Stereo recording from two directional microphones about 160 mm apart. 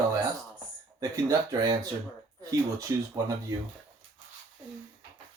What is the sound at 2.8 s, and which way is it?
Speech, 20° right (ahead or behind).